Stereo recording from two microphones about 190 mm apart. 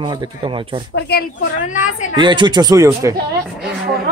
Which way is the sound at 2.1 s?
25° right (ahead or behind).